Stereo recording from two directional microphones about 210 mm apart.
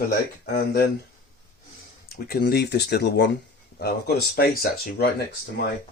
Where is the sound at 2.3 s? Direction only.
50° left (ahead or behind).